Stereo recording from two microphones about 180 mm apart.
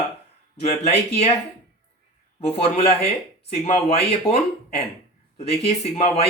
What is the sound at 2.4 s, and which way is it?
Speech, 35° left (ahead or behind).